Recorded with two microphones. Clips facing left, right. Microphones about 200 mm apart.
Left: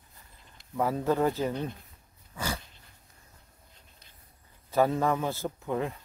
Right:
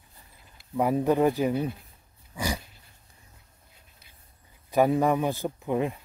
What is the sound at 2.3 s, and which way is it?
Dog, 15° right (ahead or behind).